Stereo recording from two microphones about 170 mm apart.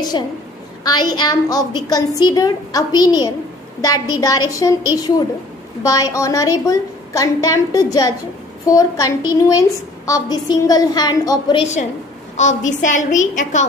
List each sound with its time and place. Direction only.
0.8 s a woman's voice: 25° left (ahead or behind)
12.4 s a woman's voice: 45° left (ahead or behind)